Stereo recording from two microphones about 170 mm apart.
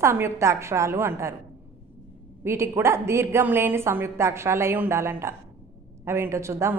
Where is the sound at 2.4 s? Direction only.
15° right (ahead or behind).